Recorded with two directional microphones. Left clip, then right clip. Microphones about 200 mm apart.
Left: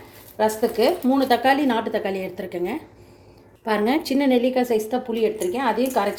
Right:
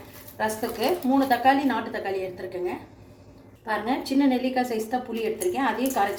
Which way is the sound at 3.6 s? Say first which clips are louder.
Left 6 dB; 55° left (ahead or behind).